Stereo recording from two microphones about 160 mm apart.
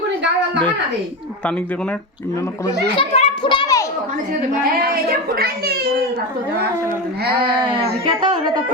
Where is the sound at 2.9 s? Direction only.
35° left (ahead or behind).